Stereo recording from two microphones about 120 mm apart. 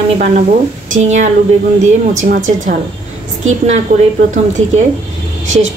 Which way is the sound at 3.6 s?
75° right (ahead or behind).